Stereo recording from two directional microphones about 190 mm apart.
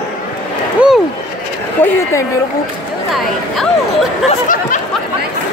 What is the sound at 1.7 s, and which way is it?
Speech, 15° left (ahead or behind).